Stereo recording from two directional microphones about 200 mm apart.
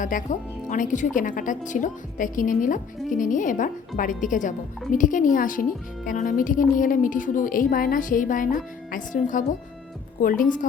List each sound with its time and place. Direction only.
0.0 s a woman's voice: 40° left (ahead or behind)